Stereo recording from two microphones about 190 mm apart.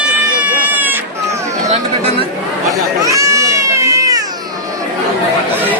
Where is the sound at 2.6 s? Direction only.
15° right (ahead or behind).